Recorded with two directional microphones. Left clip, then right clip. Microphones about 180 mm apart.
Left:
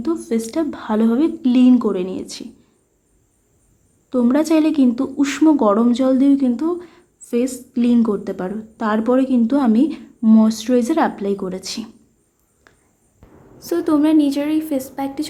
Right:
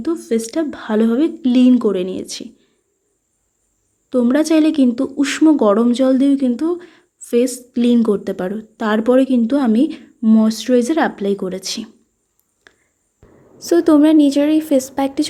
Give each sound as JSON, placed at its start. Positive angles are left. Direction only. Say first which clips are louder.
{"t": 0.0, "sound": "speech", "louder": "right 2 dB", "side_deg": -20}
{"t": 4.1, "sound": "speech", "louder": "right 2 dB", "side_deg": -25}
{"t": 12.7, "sound": "walk", "louder": "right 4 dB", "side_deg": -25}
{"t": 13.6, "sound": "speech", "louder": "right 6 dB", "side_deg": -30}